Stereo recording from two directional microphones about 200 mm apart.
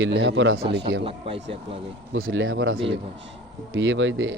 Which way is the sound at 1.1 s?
25° right (ahead or behind).